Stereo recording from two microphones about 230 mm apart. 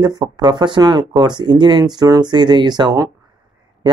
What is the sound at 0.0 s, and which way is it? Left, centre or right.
Speech, centre.